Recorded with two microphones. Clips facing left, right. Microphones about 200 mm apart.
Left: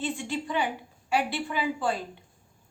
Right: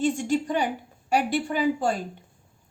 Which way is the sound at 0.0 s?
45° right (ahead or behind).